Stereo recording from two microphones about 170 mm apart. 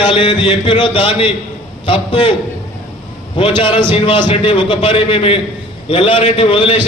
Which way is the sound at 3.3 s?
30° left (ahead or behind).